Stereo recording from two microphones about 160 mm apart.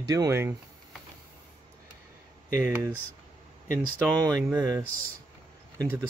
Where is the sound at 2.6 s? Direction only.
15° right (ahead or behind).